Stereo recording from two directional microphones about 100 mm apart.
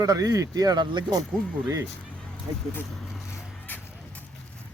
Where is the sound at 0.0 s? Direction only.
35° right (ahead or behind).